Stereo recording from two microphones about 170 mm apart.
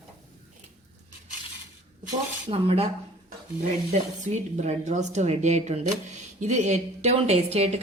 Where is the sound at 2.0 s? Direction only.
35° right (ahead or behind).